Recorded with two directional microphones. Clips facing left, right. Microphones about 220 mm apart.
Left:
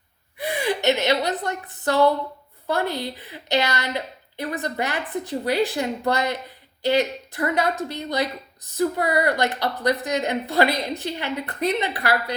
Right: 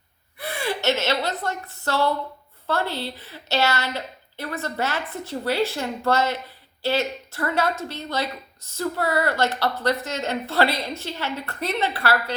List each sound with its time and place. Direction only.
0.3 s a woman's voice: 15° left (ahead or behind)